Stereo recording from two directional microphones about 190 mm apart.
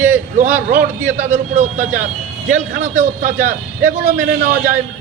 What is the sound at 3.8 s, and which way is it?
Speech, 10° right (ahead or behind).